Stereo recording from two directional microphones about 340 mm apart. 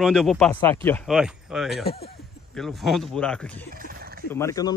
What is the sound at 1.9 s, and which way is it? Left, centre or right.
Speech, left.